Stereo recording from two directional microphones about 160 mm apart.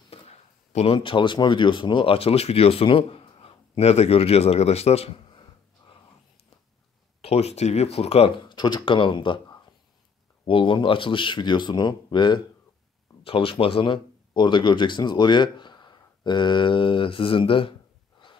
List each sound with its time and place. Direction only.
0.1 s speech: 40° left (ahead or behind)
7.2 s speech: 40° left (ahead or behind)